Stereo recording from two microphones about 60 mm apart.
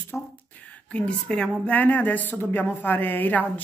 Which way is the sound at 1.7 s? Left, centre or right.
Left.